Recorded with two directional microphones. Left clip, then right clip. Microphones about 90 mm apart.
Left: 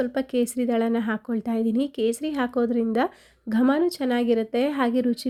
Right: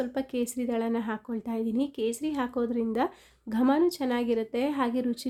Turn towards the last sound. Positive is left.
turn(degrees=35)  # may be behind; listen again after turning